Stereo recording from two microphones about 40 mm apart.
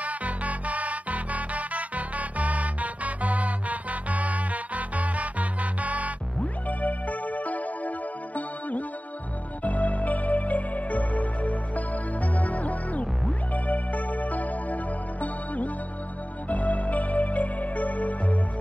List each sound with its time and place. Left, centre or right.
0.0 s music: right
6.8 s music: left